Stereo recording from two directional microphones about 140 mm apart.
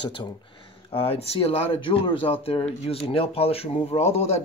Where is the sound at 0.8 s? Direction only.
45° left (ahead or behind).